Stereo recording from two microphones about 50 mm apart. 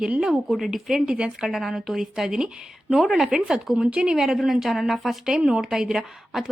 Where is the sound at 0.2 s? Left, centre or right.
Centre.